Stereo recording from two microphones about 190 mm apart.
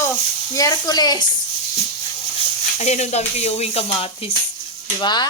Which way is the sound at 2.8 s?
35° left (ahead or behind).